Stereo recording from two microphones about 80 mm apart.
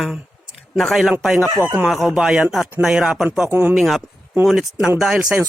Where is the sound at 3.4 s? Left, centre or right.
Right.